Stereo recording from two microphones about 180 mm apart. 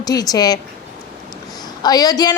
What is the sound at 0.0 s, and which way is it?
Speech, 20° left (ahead or behind).